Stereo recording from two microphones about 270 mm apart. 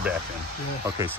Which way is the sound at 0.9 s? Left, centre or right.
Centre.